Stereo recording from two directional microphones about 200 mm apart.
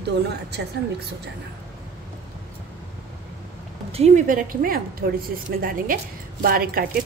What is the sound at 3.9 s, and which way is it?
A woman's voice, 30° right (ahead or behind).